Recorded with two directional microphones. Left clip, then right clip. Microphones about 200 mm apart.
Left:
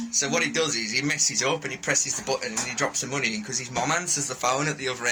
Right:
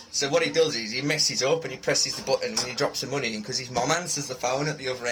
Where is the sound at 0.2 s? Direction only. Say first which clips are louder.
Right 2 dB; 10° right (ahead or behind).